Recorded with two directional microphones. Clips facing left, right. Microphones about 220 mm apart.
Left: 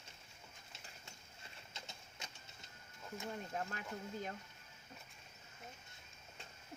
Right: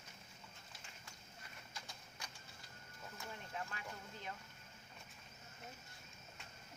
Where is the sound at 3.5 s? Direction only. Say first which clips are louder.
Left 5 dB; 45° left (ahead or behind).